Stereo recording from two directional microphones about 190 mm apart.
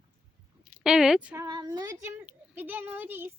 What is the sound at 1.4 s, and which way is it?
A child's voice, 20° right (ahead or behind).